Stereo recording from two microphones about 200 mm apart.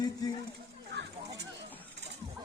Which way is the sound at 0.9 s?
60° right (ahead or behind).